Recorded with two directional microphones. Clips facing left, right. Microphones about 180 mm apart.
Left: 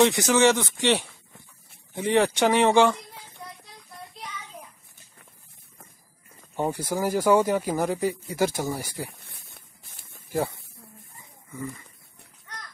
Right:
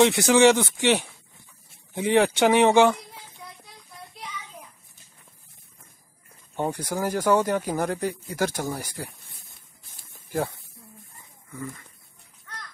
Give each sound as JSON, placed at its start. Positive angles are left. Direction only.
{"t": 0.0, "sound": "speech", "side_deg": -10}
{"t": 6.5, "sound": "speech", "side_deg": 5}
{"t": 9.3, "sound": "a sound", "side_deg": 65}